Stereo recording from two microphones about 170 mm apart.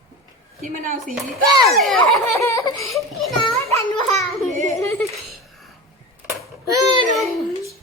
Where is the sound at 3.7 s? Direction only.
20° left (ahead or behind).